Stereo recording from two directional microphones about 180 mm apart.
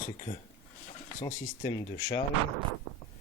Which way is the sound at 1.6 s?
20° left (ahead or behind).